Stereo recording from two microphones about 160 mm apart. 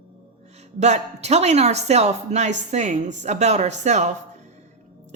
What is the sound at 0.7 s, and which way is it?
A woman's voice, 45° right (ahead or behind).